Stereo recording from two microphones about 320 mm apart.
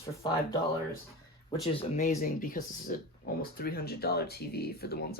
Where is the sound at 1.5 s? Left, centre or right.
Centre.